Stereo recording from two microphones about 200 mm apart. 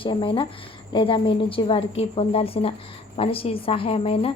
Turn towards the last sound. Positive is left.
turn(degrees=30)  # may be behind; listen again after turning